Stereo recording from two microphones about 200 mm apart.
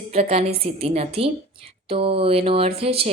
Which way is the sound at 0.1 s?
30° right (ahead or behind).